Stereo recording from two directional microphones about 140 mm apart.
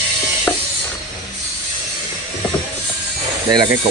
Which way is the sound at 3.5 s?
30° right (ahead or behind).